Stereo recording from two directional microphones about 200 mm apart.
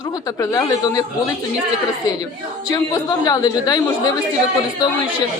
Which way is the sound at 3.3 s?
20° left (ahead or behind).